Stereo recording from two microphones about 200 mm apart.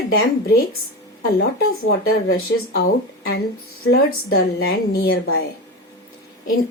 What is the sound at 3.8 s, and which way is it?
A woman's voice, 50° left (ahead or behind).